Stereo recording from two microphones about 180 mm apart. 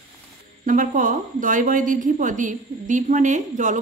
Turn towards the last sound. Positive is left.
turn(degrees=-45)  # may be behind; listen again after turning